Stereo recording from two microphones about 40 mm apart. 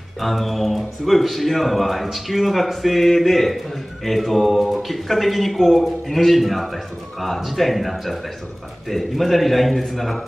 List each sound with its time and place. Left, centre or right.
0.2 s a man's voice: centre